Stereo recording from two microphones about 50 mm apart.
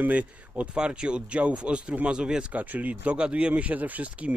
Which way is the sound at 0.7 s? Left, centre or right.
Centre.